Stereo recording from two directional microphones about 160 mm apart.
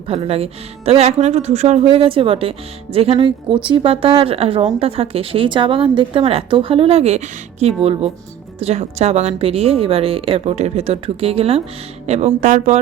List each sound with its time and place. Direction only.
0.1 s speech: 40° right (ahead or behind)